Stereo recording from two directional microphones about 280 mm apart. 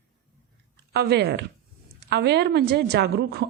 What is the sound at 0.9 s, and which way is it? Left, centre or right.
A woman's voice, right.